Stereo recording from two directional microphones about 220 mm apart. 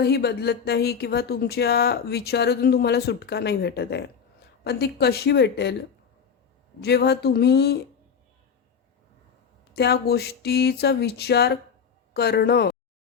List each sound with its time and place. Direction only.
0.0 s speech: 45° left (ahead or behind)
6.8 s speech: 50° left (ahead or behind)
9.7 s speech: 50° left (ahead or behind)